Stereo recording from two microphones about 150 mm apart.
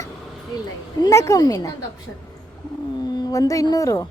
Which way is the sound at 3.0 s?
25° left (ahead or behind).